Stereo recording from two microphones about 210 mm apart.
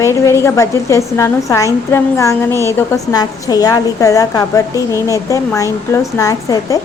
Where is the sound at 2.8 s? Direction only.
15° left (ahead or behind).